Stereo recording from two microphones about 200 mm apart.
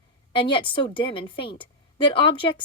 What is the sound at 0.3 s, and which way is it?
A woman's voice, 25° left (ahead or behind).